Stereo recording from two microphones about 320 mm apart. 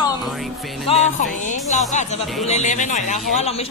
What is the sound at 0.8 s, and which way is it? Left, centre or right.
Speech, left.